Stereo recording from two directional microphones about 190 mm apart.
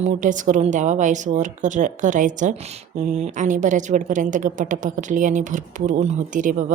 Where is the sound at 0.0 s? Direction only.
40° right (ahead or behind).